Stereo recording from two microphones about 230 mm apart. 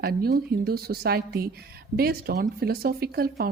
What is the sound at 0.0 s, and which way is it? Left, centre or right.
Speech, right.